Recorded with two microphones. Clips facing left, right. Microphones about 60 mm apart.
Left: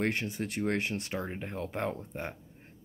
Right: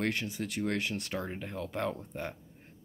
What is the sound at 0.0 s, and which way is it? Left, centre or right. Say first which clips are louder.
Speech: left 1 dB; left.